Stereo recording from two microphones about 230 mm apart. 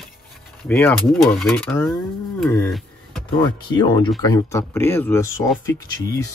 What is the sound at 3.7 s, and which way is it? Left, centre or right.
Speech, centre.